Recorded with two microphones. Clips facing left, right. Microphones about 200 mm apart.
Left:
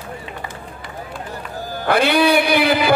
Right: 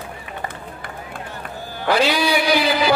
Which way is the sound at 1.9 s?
60° left (ahead or behind).